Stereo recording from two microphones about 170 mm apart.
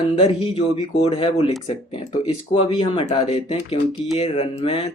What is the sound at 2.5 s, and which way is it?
Speech, 30° left (ahead or behind).